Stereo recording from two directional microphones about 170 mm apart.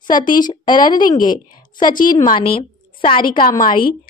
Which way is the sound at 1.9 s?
55° left (ahead or behind).